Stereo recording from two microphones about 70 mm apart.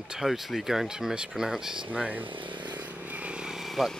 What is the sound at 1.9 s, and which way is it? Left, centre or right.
Speech, right.